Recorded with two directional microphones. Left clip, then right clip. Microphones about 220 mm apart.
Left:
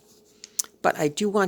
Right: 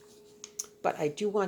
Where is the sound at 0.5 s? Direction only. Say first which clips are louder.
Left 8 dB; 50° left (ahead or behind).